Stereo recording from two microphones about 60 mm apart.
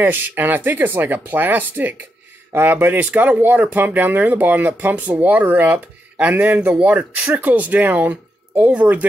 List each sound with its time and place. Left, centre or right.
0.0 s speech: right